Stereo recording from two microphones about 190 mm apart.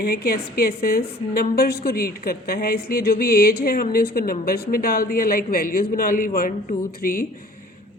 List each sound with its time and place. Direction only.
0.0 s a woman's voice: 55° left (ahead or behind)